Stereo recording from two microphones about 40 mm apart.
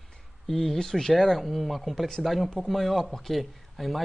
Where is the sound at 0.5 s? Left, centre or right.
Centre.